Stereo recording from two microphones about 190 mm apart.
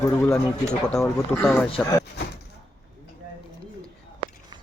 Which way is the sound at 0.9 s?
5° left (ahead or behind).